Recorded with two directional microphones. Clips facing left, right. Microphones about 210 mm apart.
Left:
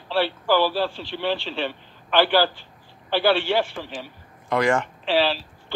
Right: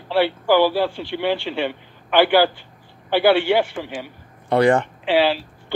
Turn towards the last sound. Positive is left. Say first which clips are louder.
# right 4 dB
turn(degrees=-15)  # may be behind; listen again after turning